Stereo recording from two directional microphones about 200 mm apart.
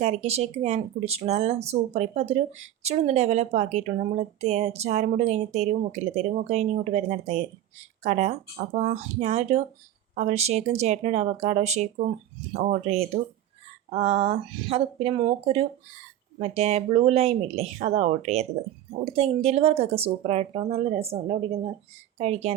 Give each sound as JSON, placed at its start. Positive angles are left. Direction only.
{"t": 0.0, "sound": "speech", "side_deg": -35}